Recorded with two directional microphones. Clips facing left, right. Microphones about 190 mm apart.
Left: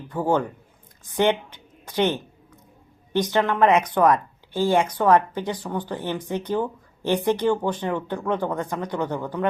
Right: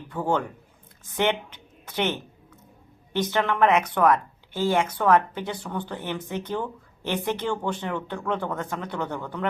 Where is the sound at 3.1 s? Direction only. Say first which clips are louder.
Left 3 dB; 15° left (ahead or behind).